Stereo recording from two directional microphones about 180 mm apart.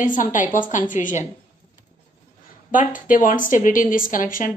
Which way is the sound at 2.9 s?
50° left (ahead or behind).